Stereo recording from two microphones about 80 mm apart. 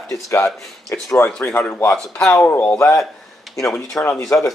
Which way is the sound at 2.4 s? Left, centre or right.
Left.